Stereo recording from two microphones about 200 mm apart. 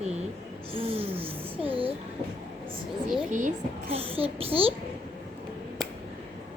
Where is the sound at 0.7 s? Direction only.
30° right (ahead or behind).